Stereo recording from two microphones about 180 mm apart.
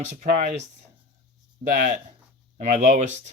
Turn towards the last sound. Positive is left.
turn(degrees=-40)  # may be behind; listen again after turning